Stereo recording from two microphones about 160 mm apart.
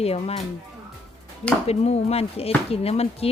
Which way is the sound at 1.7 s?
40° left (ahead or behind).